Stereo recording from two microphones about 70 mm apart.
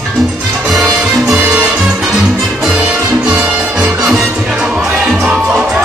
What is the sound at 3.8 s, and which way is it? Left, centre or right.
Music, centre.